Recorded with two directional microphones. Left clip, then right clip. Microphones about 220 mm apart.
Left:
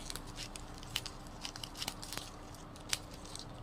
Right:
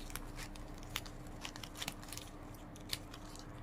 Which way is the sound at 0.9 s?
10° right (ahead or behind).